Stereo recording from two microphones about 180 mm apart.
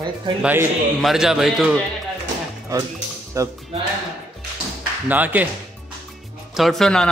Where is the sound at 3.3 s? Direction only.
20° right (ahead or behind).